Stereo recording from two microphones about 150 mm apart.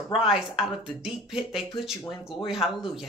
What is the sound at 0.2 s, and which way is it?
A woman's voice, centre (ahead or behind).